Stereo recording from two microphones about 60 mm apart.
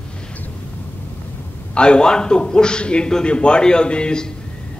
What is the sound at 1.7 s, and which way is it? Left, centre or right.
Speech, centre.